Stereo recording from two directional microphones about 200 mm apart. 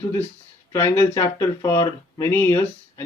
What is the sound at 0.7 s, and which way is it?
Speech, 15° left (ahead or behind).